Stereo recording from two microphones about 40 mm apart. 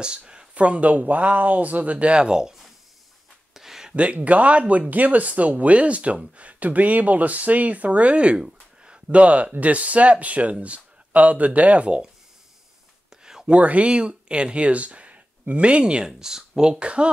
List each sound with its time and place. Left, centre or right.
0.0 s speech: right
2.2 s speech: centre
3.5 s a sound: centre
3.9 s speech: right
9.1 s speech: right
13.2 s whispering: centre
13.5 s speech: right; by 16.7 s centre
16.8 s speech: right